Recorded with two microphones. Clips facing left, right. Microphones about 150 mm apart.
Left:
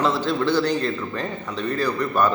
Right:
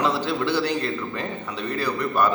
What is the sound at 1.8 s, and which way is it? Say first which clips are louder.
Speech: left 1 dB; 10° right (ahead or behind).